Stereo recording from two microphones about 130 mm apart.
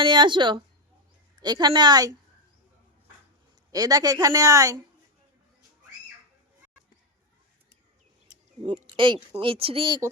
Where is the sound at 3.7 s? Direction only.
30° right (ahead or behind).